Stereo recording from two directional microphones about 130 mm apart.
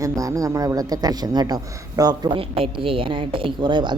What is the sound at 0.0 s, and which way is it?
A man's voice, 25° right (ahead or behind).